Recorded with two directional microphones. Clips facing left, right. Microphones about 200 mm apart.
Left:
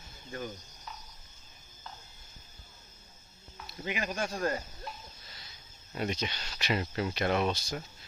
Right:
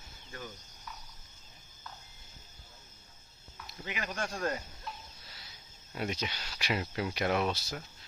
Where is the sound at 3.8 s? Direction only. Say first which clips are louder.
Left 5 dB; 20° left (ahead or behind).